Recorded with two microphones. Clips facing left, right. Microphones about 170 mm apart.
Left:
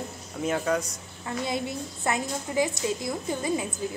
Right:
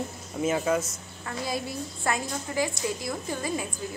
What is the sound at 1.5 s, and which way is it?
A woman's voice, 20° left (ahead or behind).